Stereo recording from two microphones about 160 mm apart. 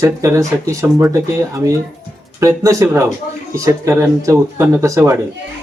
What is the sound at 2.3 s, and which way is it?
Speech, 20° right (ahead or behind).